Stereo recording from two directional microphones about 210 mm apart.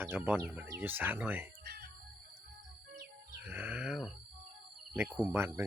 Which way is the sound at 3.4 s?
5° right (ahead or behind).